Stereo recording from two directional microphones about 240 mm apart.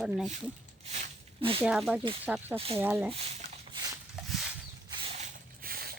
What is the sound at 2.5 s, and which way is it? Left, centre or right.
Speech, right.